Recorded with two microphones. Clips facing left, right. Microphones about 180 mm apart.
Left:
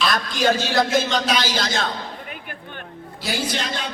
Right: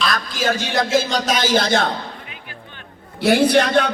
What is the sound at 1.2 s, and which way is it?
Speech, 45° right (ahead or behind).